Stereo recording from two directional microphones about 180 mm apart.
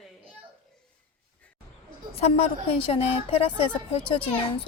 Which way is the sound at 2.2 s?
35° left (ahead or behind).